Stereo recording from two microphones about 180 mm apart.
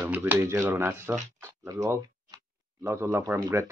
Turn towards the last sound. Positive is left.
turn(degrees=-15)  # may be behind; listen again after turning